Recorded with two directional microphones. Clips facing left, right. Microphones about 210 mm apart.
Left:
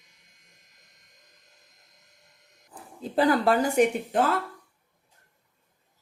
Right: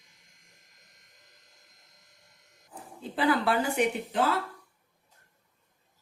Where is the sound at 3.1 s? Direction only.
40° left (ahead or behind).